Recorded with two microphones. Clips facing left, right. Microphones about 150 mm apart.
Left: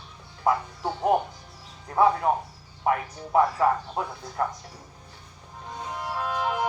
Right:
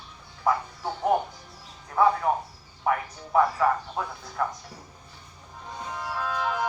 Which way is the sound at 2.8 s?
20° left (ahead or behind).